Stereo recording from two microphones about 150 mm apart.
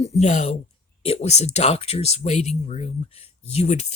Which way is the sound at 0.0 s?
50° left (ahead or behind).